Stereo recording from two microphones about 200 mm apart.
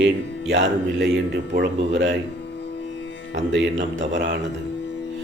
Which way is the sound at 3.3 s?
70° right (ahead or behind).